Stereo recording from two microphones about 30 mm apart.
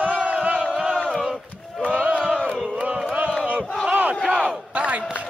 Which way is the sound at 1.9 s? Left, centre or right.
Right.